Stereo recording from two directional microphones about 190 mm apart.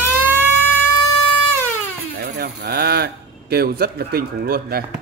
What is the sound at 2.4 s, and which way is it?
Speech, 55° right (ahead or behind).